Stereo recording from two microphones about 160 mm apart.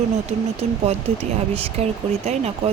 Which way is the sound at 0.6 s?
40° right (ahead or behind).